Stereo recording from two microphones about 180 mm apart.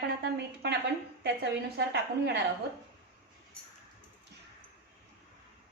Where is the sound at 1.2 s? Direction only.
75° right (ahead or behind).